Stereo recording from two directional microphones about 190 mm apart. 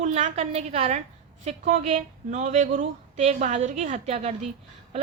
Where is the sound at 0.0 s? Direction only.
40° right (ahead or behind).